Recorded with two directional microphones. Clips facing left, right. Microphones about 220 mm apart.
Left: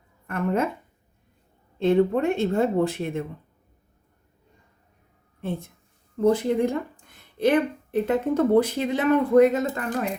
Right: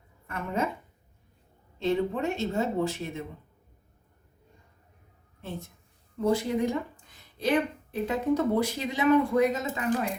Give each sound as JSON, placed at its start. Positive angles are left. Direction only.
{"t": 0.3, "sound": "a woman's voice", "side_deg": 55}
{"t": 1.8, "sound": "a woman's voice", "side_deg": 55}
{"t": 5.4, "sound": "a woman's voice", "side_deg": 55}